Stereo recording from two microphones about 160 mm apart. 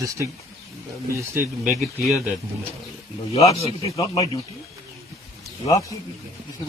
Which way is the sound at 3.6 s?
40° left (ahead or behind).